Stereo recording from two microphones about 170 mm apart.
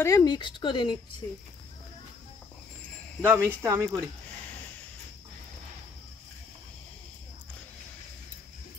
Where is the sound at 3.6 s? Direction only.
15° right (ahead or behind).